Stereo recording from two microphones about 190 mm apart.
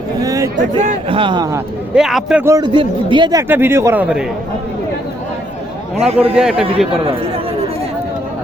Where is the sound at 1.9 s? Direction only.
Centre (ahead or behind).